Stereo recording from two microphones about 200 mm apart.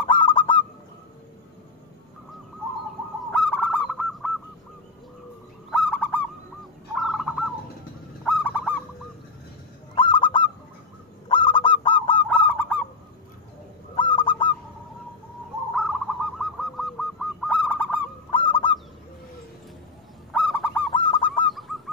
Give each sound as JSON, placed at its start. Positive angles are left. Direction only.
{"t": 0.1, "sound": "goose", "side_deg": 25}
{"t": 3.3, "sound": "goose", "side_deg": 5}
{"t": 5.7, "sound": "owl", "side_deg": 10}
{"t": 7.0, "sound": "bird", "side_deg": 0}
{"t": 8.3, "sound": "owl", "side_deg": 5}
{"t": 9.9, "sound": "owl", "side_deg": 25}
{"t": 11.2, "sound": "goose", "side_deg": 25}
{"t": 12.4, "sound": "goose", "side_deg": 10}
{"t": 13.9, "sound": "bird", "side_deg": 25}
{"t": 15.7, "sound": "bird", "side_deg": 0}
{"t": 18.3, "sound": "owl", "side_deg": 25}
{"t": 20.3, "sound": "owl", "side_deg": 10}
{"t": 20.9, "sound": "bird", "side_deg": 25}
{"t": 21.5, "sound": "owl", "side_deg": 0}